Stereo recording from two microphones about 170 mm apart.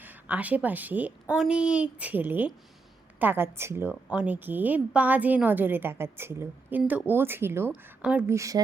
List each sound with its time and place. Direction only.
0.0 s a woman's voice: 10° right (ahead or behind)
8.4 s speech: 20° right (ahead or behind)